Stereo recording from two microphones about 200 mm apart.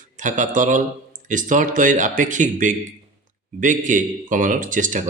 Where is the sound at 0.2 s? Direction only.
40° right (ahead or behind).